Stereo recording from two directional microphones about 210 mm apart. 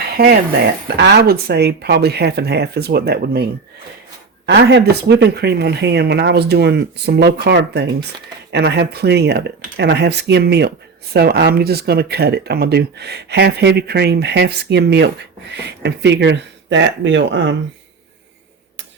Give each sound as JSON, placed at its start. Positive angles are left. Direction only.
{"t": 0.0, "sound": "a sound", "side_deg": -50}
{"t": 0.9, "sound": "speech", "side_deg": -50}
{"t": 4.4, "sound": "speech", "side_deg": -50}